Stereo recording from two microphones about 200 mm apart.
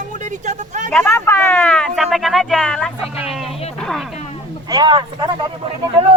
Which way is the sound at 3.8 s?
Centre (ahead or behind).